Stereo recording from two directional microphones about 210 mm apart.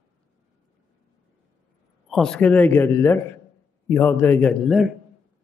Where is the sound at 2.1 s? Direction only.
5° left (ahead or behind).